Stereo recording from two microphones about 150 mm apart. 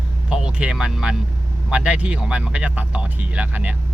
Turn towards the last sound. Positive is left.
turn(degrees=-10)  # may be behind; listen again after turning